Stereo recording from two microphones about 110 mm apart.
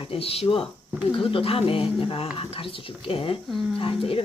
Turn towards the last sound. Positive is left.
turn(degrees=55)  # may be behind; listen again after turning